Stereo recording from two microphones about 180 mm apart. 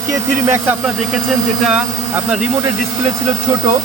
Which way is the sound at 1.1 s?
Centre (ahead or behind).